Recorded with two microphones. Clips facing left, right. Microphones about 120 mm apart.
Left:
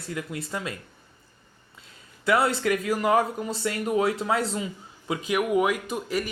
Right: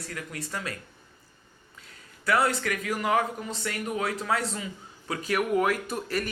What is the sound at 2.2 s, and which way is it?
Speech, 25° left (ahead or behind).